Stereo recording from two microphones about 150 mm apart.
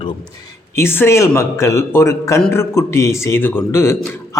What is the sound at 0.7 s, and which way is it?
A man's voice, 15° left (ahead or behind).